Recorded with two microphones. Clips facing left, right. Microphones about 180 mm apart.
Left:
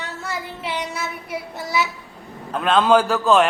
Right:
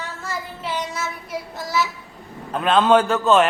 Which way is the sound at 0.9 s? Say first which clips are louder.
Even; 60° left (ahead or behind).